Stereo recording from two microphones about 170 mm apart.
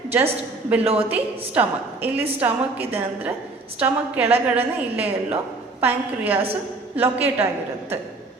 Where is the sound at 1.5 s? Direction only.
10° right (ahead or behind).